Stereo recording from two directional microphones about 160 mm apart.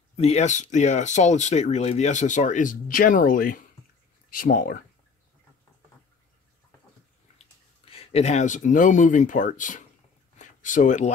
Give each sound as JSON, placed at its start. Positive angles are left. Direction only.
{"t": 0.1, "sound": "speech", "side_deg": 40}
{"t": 7.9, "sound": "speech", "side_deg": 40}